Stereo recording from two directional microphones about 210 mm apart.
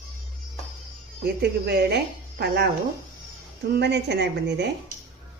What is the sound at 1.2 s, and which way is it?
Speech, 50° right (ahead or behind).